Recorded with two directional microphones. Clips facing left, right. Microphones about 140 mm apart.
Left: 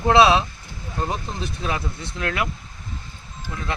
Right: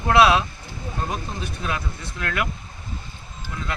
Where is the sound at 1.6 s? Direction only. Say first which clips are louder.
Left 2 dB; 25° left (ahead or behind).